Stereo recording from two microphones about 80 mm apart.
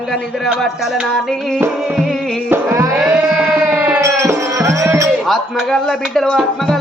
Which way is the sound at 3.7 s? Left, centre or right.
Right.